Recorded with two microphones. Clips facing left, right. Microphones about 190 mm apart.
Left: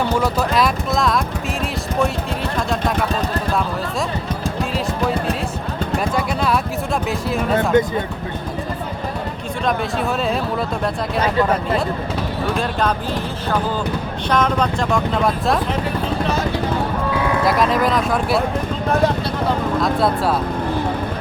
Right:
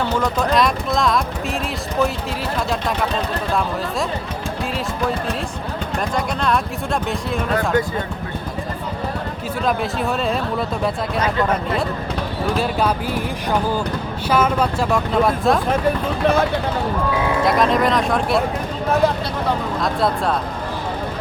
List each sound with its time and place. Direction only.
0.0 s music: 10° left (ahead or behind)
6.1 s a sound: 5° left (ahead or behind)
7.5 s speech: 20° left (ahead or behind)
9.6 s speech: centre (ahead or behind)
14.3 s speech: 5° right (ahead or behind)
17.4 s speech: centre (ahead or behind)
19.8 s speech: centre (ahead or behind)